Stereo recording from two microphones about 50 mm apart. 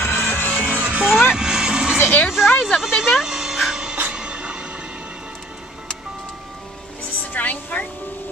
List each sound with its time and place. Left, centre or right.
0.0 s music: left
0.3 s music: left
0.7 s music: right
1.3 s vehicle: centre
2.0 s a sound: left
2.2 s a sound: centre
3.1 s music: centre
4.1 s vehicle: centre
7.3 s music: left